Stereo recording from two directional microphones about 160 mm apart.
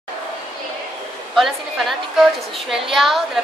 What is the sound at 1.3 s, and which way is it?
A woman's voice, centre (ahead or behind).